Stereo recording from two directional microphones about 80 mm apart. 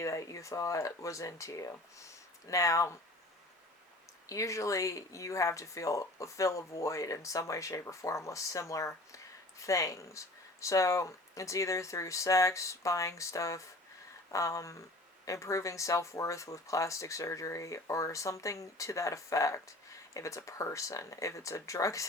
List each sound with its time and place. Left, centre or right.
0.0 s speech: left
4.3 s speech: left